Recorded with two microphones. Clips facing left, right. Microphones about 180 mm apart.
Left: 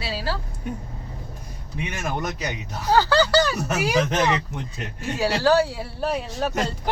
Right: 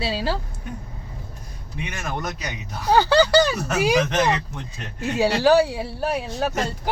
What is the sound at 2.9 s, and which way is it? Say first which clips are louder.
Speech: right 2 dB; 20° right (ahead or behind).